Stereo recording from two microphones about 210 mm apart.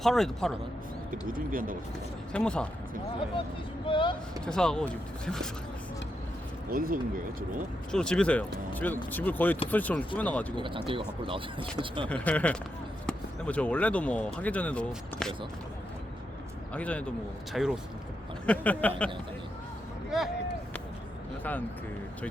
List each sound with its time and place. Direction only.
0.0 s speech: centre (ahead or behind)
1.3 s speech: 40° right (ahead or behind)
2.3 s speech: 5° left (ahead or behind)
3.8 s speech: 25° left (ahead or behind)
4.4 s speech: 5° left (ahead or behind)
6.7 s speech: 40° right (ahead or behind)
7.9 s speech: 5° left (ahead or behind)
10.8 s speech: 25° right (ahead or behind)
12.0 s speech: 5° left (ahead or behind)
16.7 s speech: 5° left (ahead or behind)
20.1 s a sound: centre (ahead or behind)